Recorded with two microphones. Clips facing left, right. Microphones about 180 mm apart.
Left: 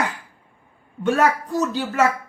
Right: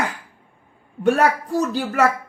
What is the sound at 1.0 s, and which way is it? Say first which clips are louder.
Speech: right 2 dB; 35° right (ahead or behind).